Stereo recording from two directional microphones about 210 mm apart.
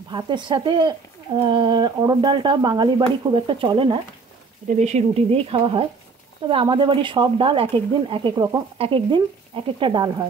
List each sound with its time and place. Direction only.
0.1 s speech: 20° right (ahead or behind)